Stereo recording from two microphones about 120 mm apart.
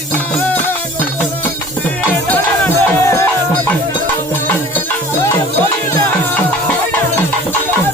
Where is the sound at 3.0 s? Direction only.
20° left (ahead or behind).